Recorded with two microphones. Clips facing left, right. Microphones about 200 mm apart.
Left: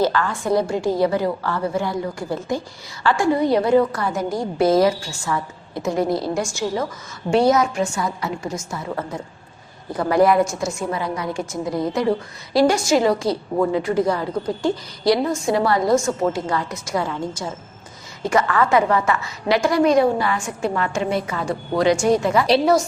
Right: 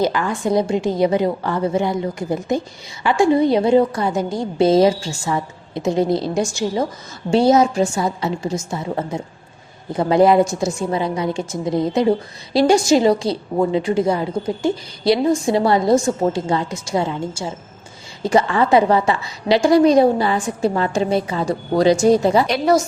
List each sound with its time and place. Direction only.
0.0 s a woman's voice: 15° right (ahead or behind); by 22.4 s 35° right (ahead or behind)